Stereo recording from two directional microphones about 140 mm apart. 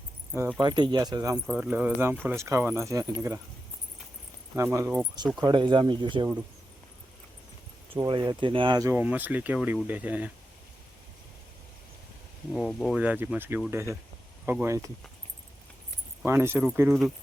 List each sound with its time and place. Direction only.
0.6 s speech: 30° right (ahead or behind)
1.5 s speech: 10° right (ahead or behind)
4.5 s speech: 20° right (ahead or behind)
5.4 s speech: 30° right (ahead or behind)
8.2 s speech: 35° right (ahead or behind)
9.0 s speech: 10° right (ahead or behind)
12.5 s speech: centre (ahead or behind)
13.0 s speech: 10° right (ahead or behind)
16.2 s speech: 15° right (ahead or behind)